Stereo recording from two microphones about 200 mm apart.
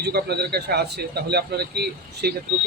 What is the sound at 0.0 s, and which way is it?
Speech, 55° right (ahead or behind).